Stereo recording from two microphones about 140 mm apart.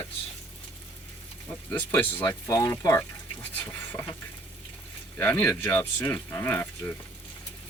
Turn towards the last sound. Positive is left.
turn(degrees=15)  # may be behind; listen again after turning